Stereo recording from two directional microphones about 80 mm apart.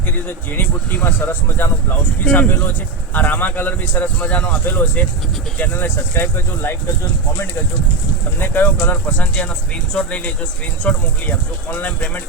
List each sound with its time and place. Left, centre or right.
0.3 s speech: left
8.4 s speech: left